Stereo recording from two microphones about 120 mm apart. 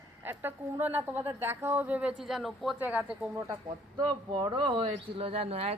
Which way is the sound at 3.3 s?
20° right (ahead or behind).